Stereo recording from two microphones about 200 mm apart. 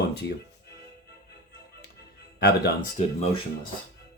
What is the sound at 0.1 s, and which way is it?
Music, 55° left (ahead or behind).